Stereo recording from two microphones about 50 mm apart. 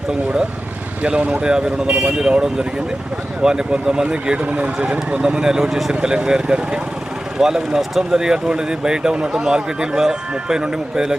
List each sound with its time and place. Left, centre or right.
1.4 s speech: centre
4.4 s speech: right